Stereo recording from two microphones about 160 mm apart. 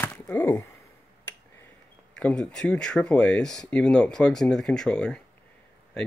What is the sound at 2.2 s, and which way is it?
Speech, 5° left (ahead or behind).